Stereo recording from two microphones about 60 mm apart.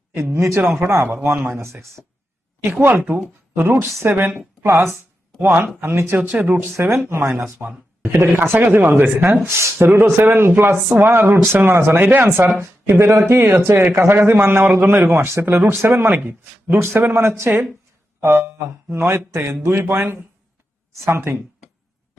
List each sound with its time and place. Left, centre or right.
0.2 s a man's voice: right
0.8 s speech: right
1.0 s a man's voice: right
1.6 s speech: right
2.9 s speech: right
3.5 s a man's voice: right
6.2 s speech: right
6.7 s speech: right
7.6 s speech: right
8.0 s a man's voice: right
9.5 s a man's voice: right
15.3 s speech: right
15.5 s a man's voice: right